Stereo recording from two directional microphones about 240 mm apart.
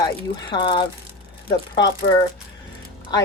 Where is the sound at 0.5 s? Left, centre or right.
Centre.